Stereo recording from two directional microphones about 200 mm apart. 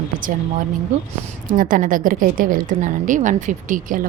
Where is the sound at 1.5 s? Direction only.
45° right (ahead or behind).